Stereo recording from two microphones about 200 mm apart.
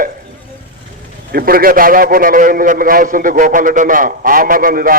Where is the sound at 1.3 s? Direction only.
50° right (ahead or behind).